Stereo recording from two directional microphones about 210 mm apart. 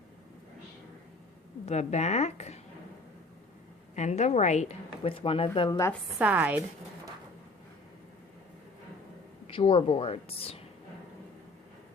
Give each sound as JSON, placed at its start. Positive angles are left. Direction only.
{"t": 1.6, "sound": "speech", "side_deg": 30}
{"t": 3.9, "sound": "speech", "side_deg": 35}
{"t": 6.1, "sound": "speech", "side_deg": -5}
{"t": 9.5, "sound": "speech", "side_deg": 25}